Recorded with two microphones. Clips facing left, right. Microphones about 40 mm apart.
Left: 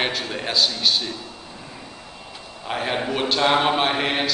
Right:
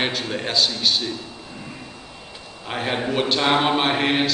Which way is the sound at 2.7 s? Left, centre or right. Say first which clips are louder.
Even; centre.